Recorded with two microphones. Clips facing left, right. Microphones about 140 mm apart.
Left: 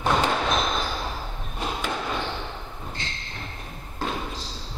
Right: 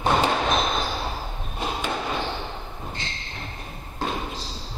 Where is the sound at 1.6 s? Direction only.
15° right (ahead or behind).